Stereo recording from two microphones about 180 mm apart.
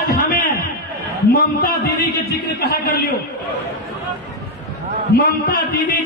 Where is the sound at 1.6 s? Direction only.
55° left (ahead or behind).